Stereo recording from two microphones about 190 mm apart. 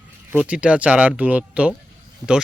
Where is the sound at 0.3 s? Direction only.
5° right (ahead or behind).